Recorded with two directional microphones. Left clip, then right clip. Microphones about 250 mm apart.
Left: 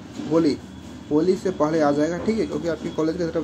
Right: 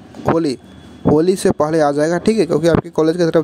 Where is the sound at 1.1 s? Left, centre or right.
Right.